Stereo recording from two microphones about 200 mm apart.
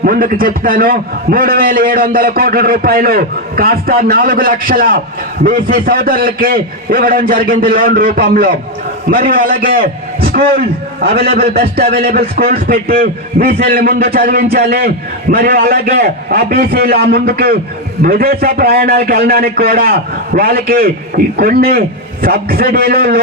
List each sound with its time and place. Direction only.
0.0 s a man's voice: 45° right (ahead or behind)